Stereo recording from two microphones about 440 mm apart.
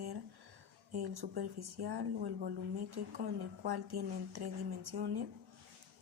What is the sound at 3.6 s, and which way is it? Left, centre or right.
A woman's voice, right.